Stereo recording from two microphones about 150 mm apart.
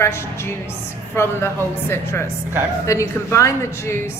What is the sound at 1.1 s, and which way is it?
A woman's voice, 15° left (ahead or behind).